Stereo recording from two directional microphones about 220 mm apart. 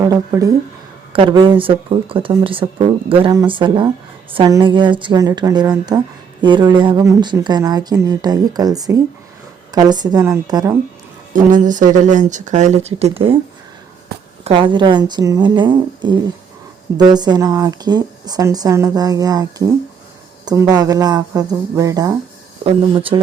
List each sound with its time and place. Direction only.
0.0 s speech: 15° right (ahead or behind)
11.3 s speech: 35° right (ahead or behind)
14.4 s speech: 20° right (ahead or behind)